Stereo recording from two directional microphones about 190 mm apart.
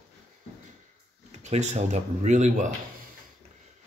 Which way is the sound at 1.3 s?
35° right (ahead or behind).